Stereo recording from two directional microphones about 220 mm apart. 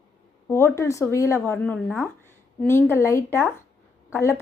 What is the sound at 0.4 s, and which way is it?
A woman's voice, 10° left (ahead or behind).